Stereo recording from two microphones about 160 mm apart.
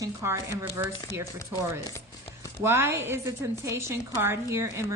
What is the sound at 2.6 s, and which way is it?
A woman's voice, 15° right (ahead or behind).